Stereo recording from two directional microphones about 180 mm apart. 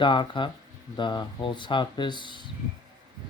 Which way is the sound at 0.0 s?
25° left (ahead or behind).